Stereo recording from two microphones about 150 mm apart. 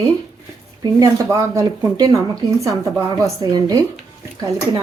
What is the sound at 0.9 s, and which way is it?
Speech, 20° right (ahead or behind).